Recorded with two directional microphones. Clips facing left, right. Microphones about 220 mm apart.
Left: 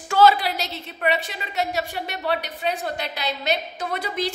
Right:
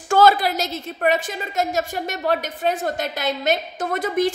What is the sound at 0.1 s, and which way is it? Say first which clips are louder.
A woman's voice: right 2 dB; 50° right (ahead or behind).